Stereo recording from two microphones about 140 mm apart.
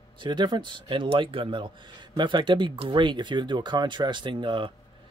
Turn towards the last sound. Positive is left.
turn(degrees=-35)  # may be behind; listen again after turning